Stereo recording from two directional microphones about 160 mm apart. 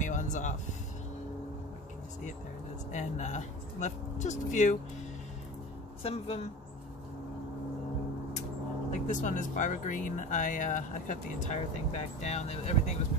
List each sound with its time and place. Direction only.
0.0 s a sound: 50° left (ahead or behind)
2.9 s speech: 45° left (ahead or behind)
6.0 s speech: 40° left (ahead or behind)
8.9 s speech: 50° left (ahead or behind)